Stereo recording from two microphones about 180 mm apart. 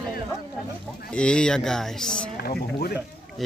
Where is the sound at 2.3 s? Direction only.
55° left (ahead or behind).